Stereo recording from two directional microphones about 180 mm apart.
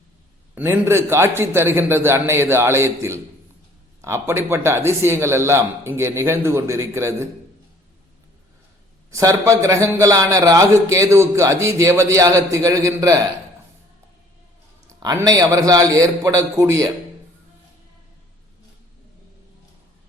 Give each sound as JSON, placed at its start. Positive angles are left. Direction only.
{"t": 0.5, "sound": "a man's voice", "side_deg": -15}
{"t": 9.0, "sound": "a man's voice", "side_deg": -15}
{"t": 15.0, "sound": "a man's voice", "side_deg": -20}